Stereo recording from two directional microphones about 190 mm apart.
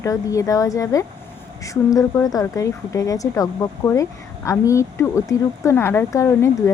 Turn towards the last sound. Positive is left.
turn(degrees=15)  # may be behind; listen again after turning